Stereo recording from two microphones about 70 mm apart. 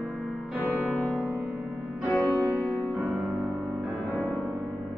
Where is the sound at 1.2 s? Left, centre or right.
Right.